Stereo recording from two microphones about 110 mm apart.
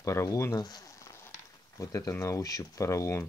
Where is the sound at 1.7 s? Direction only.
30° left (ahead or behind).